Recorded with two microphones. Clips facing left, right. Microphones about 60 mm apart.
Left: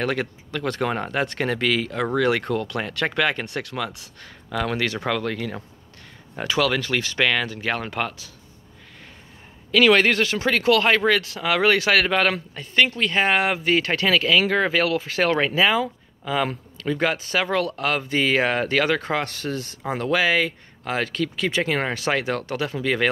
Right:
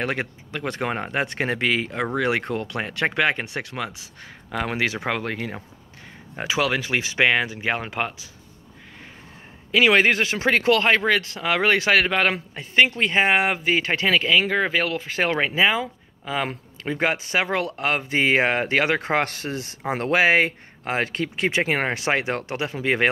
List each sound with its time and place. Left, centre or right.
0.0 s speech: centre
4.5 s speech: centre
9.7 s speech: centre
16.8 s speech: right
19.9 s speech: right
22.8 s speech: right